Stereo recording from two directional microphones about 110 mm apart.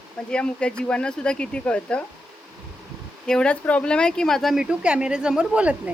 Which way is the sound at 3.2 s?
5° left (ahead or behind).